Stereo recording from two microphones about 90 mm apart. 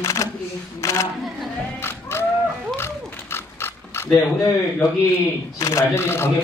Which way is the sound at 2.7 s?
25° left (ahead or behind).